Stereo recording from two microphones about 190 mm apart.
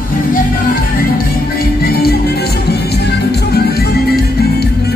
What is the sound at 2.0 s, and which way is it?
Music, 55° left (ahead or behind).